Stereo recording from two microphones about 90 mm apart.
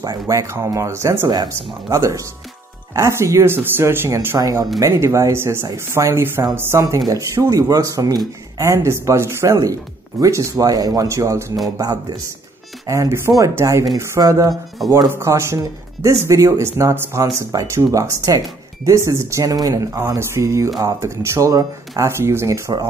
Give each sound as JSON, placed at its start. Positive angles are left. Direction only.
{"t": 0.0, "sound": "speech", "side_deg": -40}
{"t": 4.4, "sound": "speech", "side_deg": -35}
{"t": 7.1, "sound": "speech", "side_deg": -35}
{"t": 10.5, "sound": "speech", "side_deg": -45}
{"t": 12.8, "sound": "speech", "side_deg": -35}